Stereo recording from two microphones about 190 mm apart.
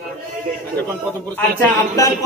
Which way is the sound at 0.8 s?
10° left (ahead or behind).